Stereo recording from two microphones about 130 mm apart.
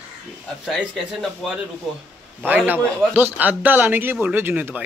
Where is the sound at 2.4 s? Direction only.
15° right (ahead or behind).